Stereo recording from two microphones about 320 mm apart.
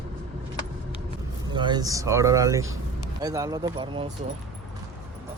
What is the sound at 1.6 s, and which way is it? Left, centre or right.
Speech, centre.